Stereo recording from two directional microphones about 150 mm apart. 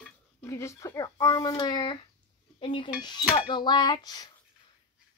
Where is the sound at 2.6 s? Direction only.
35° left (ahead or behind).